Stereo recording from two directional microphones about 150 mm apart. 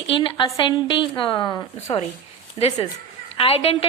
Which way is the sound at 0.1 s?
35° left (ahead or behind).